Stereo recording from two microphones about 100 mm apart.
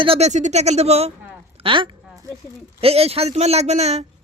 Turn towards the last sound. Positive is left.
turn(degrees=-90)